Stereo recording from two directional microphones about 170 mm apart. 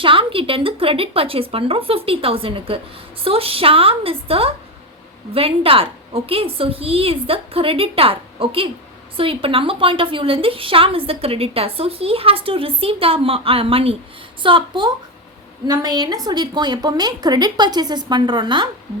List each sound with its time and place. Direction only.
0.0 s a woman's voice: 30° right (ahead or behind)